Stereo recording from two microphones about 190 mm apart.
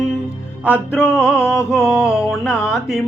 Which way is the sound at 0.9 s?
15° left (ahead or behind).